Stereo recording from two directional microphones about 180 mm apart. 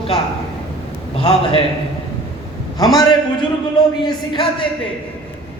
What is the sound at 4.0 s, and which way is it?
Speech, 30° left (ahead or behind).